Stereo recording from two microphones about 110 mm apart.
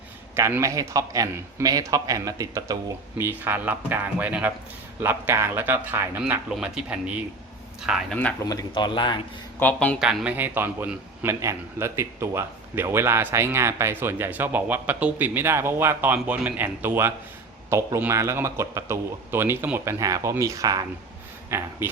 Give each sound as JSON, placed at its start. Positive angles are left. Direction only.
{"t": 0.3, "sound": "a man's voice", "side_deg": -25}
{"t": 3.2, "sound": "a man's voice", "side_deg": -20}
{"t": 8.7, "sound": "a man's voice", "side_deg": 45}
{"t": 9.6, "sound": "speech", "side_deg": 15}
{"t": 10.0, "sound": "speech", "side_deg": -5}
{"t": 10.3, "sound": "a man's voice", "side_deg": -15}
{"t": 21.5, "sound": "a man's voice", "side_deg": -20}